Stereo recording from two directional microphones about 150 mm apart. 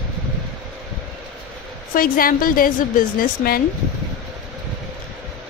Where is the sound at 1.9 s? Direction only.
70° left (ahead or behind).